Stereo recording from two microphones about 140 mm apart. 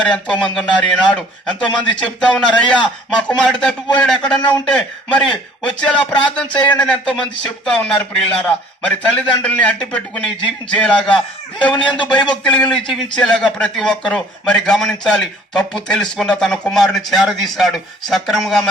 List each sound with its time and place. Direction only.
0.0 s a man's voice: 5° left (ahead or behind)
12.5 s a man's voice: 30° left (ahead or behind)
12.7 s a man's voice: centre (ahead or behind)